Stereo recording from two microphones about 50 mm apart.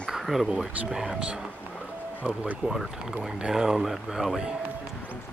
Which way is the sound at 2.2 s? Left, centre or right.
Right.